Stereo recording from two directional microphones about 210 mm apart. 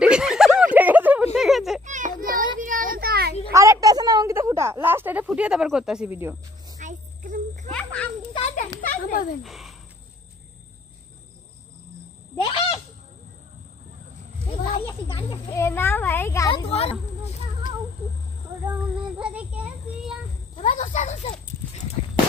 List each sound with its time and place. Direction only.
0.0 s a sound: 5° right (ahead or behind)
1.9 s child singing: 35° right (ahead or behind)
2.6 s a sound: 40° right (ahead or behind)
3.5 s a sound: 15° right (ahead or behind)
6.8 s insect: 40° right (ahead or behind)
7.7 s a child's voice: 5° left (ahead or behind)
8.4 s a sound: 30° left (ahead or behind)
8.8 s speech: 40° left (ahead or behind)
9.4 s speech: centre (ahead or behind)
12.4 s speech: 25° left (ahead or behind)
15.1 s a child's voice: 15° left (ahead or behind)
16.6 s speech: 30° left (ahead or behind)
19.1 s a child's voice: 5° right (ahead or behind)
20.5 s horse: 35° left (ahead or behind)